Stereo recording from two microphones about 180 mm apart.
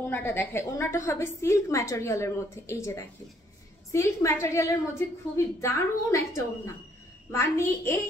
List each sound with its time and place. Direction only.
0.1 s a woman's voice: 10° left (ahead or behind)